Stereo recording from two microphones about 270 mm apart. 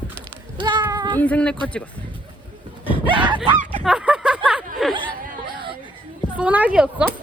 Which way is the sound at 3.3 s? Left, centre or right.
Right.